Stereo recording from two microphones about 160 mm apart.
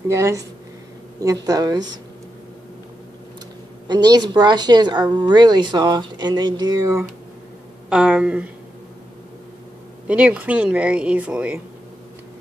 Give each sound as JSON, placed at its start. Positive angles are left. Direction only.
{"t": 0.1, "sound": "speech", "side_deg": -20}
{"t": 3.8, "sound": "speech", "side_deg": -25}
{"t": 7.9, "sound": "speech", "side_deg": -5}
{"t": 10.0, "sound": "speech", "side_deg": -10}